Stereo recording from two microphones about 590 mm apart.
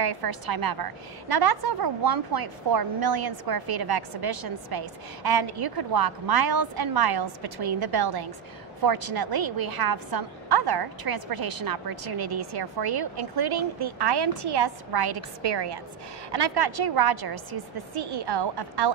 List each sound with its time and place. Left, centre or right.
0.0 s a woman's voice: right